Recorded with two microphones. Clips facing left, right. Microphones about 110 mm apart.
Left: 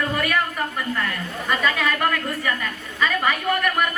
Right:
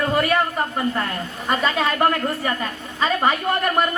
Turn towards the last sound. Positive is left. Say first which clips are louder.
# right 2 dB
turn(degrees=-30)  # may be behind; listen again after turning